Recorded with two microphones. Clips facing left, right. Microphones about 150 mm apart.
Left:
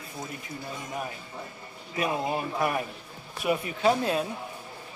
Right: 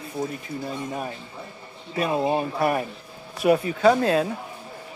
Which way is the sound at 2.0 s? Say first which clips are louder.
Right 5 dB; 30° right (ahead or behind).